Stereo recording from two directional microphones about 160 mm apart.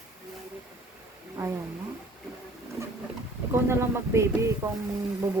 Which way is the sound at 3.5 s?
15° right (ahead or behind).